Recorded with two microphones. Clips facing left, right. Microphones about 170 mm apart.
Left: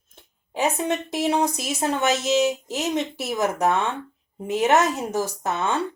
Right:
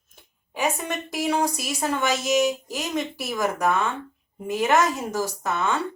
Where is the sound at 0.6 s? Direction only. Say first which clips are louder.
Left 3 dB; 25° left (ahead or behind).